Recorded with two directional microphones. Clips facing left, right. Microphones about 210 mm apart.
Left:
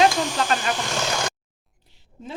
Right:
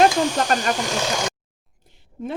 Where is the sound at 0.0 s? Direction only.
45° right (ahead or behind).